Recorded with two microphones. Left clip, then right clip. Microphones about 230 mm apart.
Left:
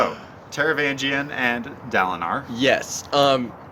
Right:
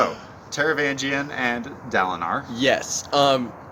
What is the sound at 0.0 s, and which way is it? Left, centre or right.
Speech, centre.